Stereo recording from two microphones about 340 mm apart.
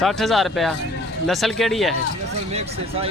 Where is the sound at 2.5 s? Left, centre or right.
Centre.